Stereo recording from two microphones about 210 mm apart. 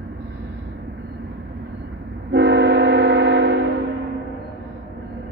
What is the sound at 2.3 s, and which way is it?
Train, 55° right (ahead or behind).